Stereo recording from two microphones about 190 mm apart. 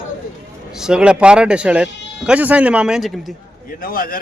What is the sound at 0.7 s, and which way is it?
Speech, 5° right (ahead or behind).